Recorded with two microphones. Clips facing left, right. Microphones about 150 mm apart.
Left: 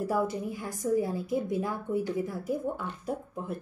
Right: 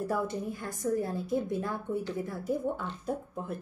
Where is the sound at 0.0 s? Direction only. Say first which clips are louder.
Left 2 dB; 10° left (ahead or behind).